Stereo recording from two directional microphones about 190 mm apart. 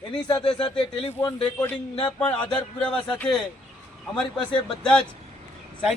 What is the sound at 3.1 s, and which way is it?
Speech, 5° left (ahead or behind).